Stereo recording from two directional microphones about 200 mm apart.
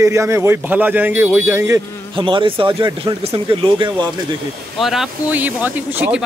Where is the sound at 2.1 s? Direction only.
25° right (ahead or behind).